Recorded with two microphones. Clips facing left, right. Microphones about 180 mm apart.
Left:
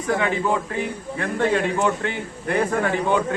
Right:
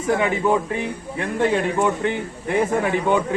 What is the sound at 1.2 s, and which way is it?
A man's voice, 15° right (ahead or behind).